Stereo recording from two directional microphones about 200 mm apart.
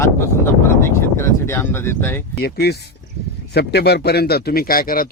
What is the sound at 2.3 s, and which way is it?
A man's voice, 55° left (ahead or behind).